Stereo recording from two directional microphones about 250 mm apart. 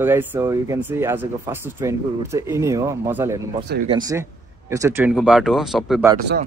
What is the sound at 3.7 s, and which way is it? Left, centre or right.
Speech, right.